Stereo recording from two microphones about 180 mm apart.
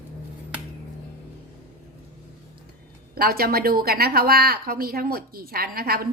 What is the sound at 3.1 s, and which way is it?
A woman's voice, 55° right (ahead or behind).